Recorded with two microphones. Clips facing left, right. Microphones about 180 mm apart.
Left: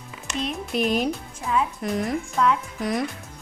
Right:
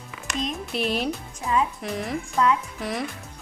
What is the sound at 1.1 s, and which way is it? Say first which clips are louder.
Speech: even; centre (ahead or behind).